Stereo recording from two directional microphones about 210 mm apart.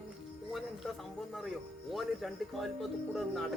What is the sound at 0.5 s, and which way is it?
A man's voice, centre (ahead or behind).